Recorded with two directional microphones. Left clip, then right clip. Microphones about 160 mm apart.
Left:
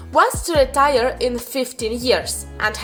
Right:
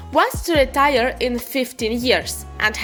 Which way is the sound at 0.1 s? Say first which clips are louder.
Left 1 dB; 20° right (ahead or behind).